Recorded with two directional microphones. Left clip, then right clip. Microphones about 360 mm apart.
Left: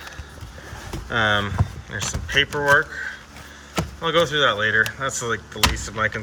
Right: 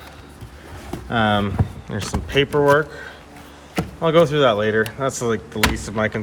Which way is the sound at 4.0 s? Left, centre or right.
Right.